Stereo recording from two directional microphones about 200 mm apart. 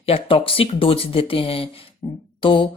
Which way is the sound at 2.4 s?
25° left (ahead or behind).